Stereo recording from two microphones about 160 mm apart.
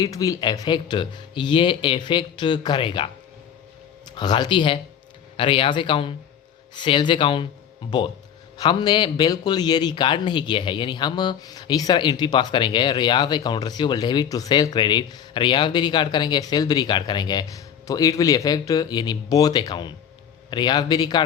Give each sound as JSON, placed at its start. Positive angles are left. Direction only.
{"t": 0.0, "sound": "a man's voice", "side_deg": 20}